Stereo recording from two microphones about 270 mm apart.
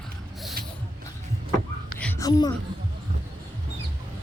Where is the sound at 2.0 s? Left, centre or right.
Centre.